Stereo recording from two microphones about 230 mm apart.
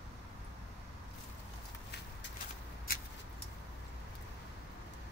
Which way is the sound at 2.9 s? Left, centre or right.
Left.